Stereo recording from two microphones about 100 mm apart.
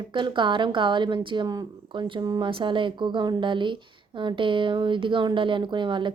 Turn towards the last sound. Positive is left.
turn(degrees=-55)  # may be behind; listen again after turning